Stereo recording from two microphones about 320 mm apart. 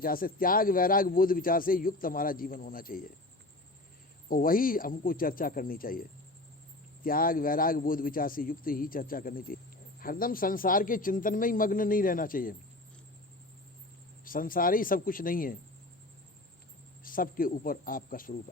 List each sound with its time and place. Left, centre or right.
0.0 s a man's voice: left
4.3 s a man's voice: left
14.3 s a man's voice: left
17.0 s a man's voice: left